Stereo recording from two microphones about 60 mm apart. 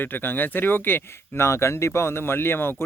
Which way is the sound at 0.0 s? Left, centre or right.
Left.